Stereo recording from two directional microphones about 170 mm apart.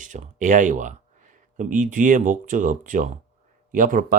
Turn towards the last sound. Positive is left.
turn(degrees=-50)  # may be behind; listen again after turning